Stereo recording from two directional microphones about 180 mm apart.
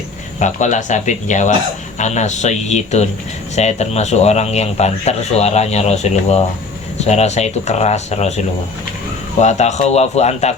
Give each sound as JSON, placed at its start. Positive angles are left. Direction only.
{"t": 0.3, "sound": "speech", "side_deg": 40}